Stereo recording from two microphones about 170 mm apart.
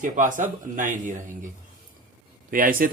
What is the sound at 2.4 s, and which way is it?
Speech, 55° right (ahead or behind).